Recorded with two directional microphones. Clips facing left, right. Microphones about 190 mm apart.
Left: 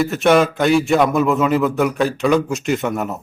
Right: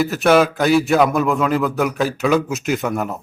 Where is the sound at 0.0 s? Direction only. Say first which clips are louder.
Even; centre (ahead or behind).